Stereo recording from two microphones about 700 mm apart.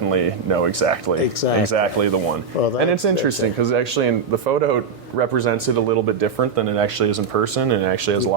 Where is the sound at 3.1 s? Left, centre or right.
Right.